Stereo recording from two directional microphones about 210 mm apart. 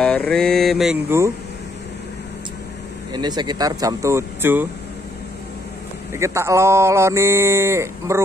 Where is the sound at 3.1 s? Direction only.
20° right (ahead or behind).